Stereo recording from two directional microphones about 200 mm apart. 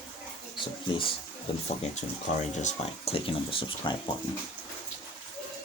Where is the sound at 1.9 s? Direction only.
35° left (ahead or behind).